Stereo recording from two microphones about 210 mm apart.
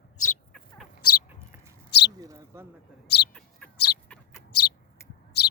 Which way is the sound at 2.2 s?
15° right (ahead or behind).